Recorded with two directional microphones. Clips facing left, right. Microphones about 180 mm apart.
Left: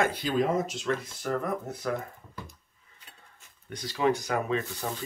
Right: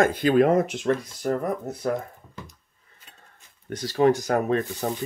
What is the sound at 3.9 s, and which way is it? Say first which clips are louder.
Speech: right 6 dB; 45° right (ahead or behind).